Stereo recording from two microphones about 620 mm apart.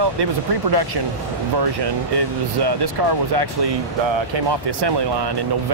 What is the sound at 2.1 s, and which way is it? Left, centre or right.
Speech, right.